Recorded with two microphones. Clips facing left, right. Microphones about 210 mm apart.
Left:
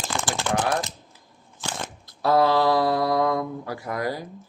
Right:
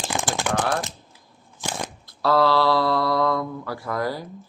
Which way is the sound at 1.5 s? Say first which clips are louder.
Right 2 dB; 15° right (ahead or behind).